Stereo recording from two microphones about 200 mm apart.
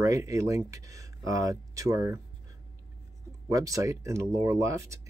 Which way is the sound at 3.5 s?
15° right (ahead or behind).